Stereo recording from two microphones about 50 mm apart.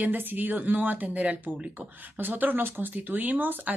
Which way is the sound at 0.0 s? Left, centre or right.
Right.